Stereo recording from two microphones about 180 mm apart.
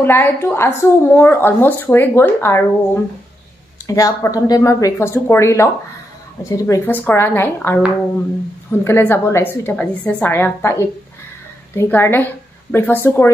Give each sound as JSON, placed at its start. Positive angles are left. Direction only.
{"t": 0.0, "sound": "a woman's voice", "side_deg": 10}
{"t": 8.8, "sound": "a woman's voice", "side_deg": 10}